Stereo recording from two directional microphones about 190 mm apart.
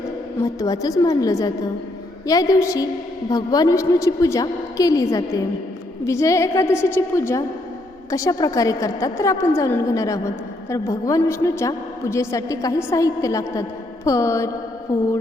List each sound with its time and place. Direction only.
0.4 s a woman's voice: 20° left (ahead or behind)